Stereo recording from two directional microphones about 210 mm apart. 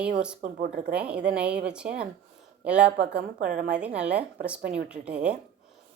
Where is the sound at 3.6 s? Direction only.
5° right (ahead or behind).